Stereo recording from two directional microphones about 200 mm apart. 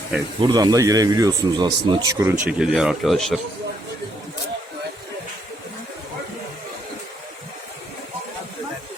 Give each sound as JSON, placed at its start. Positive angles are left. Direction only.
{"t": 0.4, "sound": "speech", "side_deg": -20}